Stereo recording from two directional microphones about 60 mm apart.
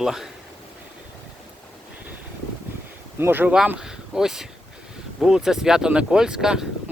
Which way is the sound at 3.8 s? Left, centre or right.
Centre.